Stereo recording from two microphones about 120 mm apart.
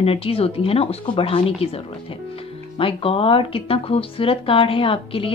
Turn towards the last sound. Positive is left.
turn(degrees=50)  # may be behind; listen again after turning